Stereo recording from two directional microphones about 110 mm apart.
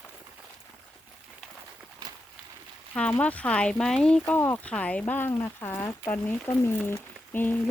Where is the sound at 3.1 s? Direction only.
15° left (ahead or behind).